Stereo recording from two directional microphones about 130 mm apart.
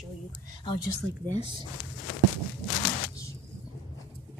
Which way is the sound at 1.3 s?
35° right (ahead or behind).